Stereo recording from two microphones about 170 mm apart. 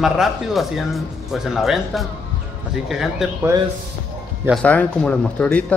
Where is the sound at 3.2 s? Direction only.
Centre (ahead or behind).